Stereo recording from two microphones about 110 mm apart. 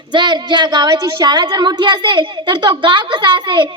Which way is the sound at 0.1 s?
45° right (ahead or behind).